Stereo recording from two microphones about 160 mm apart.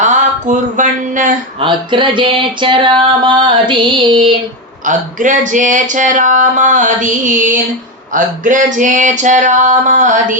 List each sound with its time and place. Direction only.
0.0 s a sound: 50° right (ahead or behind)
1.6 s music: 30° right (ahead or behind)
4.9 s speech: 50° right (ahead or behind)